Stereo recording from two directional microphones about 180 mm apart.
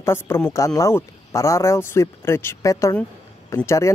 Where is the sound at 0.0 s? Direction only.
15° left (ahead or behind).